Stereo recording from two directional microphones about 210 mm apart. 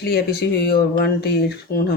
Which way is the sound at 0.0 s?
50° left (ahead or behind).